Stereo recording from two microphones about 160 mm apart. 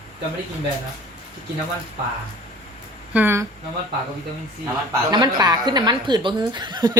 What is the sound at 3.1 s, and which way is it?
Speech, 15° right (ahead or behind).